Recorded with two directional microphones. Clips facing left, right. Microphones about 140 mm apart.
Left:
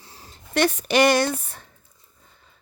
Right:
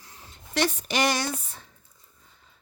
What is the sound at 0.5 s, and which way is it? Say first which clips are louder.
Speech: left 6 dB; 60° left (ahead or behind).